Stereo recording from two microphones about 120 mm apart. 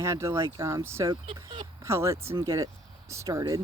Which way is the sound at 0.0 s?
25° right (ahead or behind).